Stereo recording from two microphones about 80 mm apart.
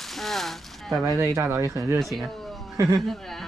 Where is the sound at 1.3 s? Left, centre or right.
Right.